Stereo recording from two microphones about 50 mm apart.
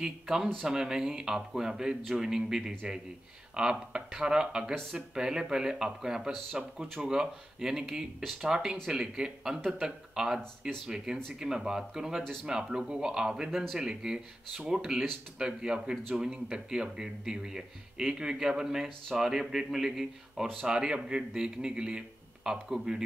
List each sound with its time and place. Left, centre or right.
0.0 s speech: centre